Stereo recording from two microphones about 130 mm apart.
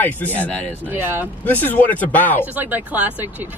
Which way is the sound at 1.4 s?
15° left (ahead or behind).